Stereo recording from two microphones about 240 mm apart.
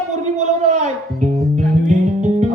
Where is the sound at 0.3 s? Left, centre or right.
Right.